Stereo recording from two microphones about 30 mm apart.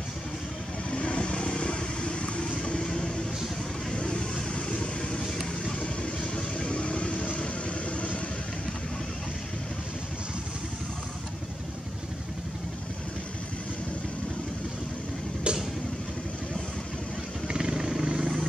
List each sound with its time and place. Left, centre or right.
0.8 s vehicle: left
3.9 s vehicle: left
6.3 s vehicle: left
15.5 s vehicle: right
17.5 s vehicle: right